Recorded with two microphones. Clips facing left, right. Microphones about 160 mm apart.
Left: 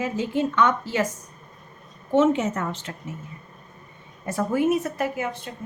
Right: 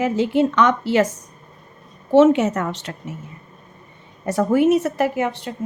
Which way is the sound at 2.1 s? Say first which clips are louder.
Right 6 dB; 80° right.